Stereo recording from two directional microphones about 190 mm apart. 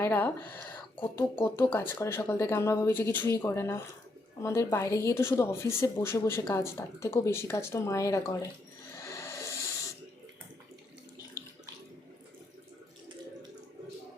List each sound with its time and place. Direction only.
0.0 s speech: 10° left (ahead or behind)
9.0 s music: 15° left (ahead or behind)